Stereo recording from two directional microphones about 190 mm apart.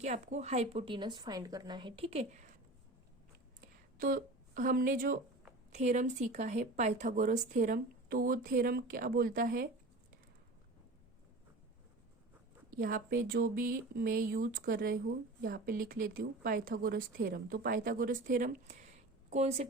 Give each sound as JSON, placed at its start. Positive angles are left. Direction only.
{"t": 0.0, "sound": "a woman's voice", "side_deg": -40}
{"t": 3.6, "sound": "a sound", "side_deg": -45}
{"t": 5.7, "sound": "speech", "side_deg": -40}
{"t": 12.7, "sound": "speech", "side_deg": -45}